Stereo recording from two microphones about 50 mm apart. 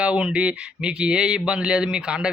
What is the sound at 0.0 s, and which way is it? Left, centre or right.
Speech, centre.